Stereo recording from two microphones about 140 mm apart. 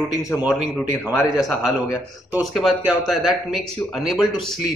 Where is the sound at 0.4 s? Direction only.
10° right (ahead or behind).